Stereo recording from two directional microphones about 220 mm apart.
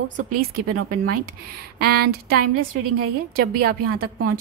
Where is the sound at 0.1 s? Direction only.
40° right (ahead or behind).